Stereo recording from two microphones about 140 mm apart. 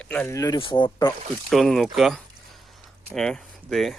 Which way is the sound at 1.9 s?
Centre (ahead or behind).